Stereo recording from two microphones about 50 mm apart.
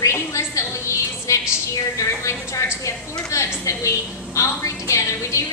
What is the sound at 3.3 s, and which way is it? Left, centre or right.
A woman's voice, left.